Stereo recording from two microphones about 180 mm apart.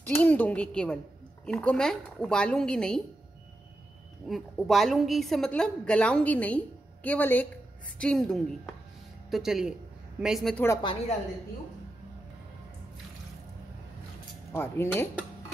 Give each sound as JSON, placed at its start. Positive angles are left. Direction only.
{"t": 0.0, "sound": "a woman's voice", "side_deg": 10}
{"t": 4.3, "sound": "a woman's voice", "side_deg": 0}
{"t": 10.8, "sound": "a woman's voice", "side_deg": 25}
{"t": 14.5, "sound": "a woman's voice", "side_deg": 15}